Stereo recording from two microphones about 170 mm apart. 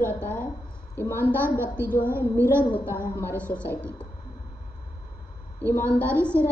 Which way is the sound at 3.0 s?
15° left (ahead or behind).